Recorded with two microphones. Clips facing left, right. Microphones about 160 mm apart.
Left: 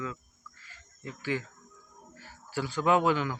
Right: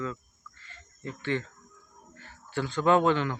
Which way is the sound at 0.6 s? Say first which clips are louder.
Right 3 dB; 5° left (ahead or behind).